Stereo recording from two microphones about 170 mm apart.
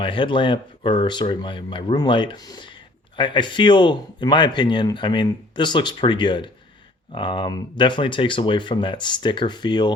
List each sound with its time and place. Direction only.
0.0 s speech: 30° left (ahead or behind)